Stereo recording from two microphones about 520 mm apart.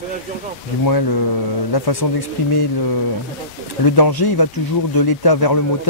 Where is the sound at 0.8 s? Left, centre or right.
Left.